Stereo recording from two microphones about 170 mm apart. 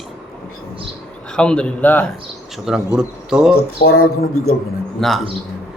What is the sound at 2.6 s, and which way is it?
Speech, 5° right (ahead or behind).